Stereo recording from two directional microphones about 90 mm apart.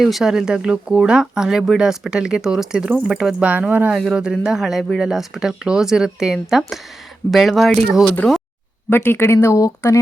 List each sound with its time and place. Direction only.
0.0 s speech: centre (ahead or behind)
8.2 s speech: 10° left (ahead or behind)
8.9 s speech: 25° left (ahead or behind)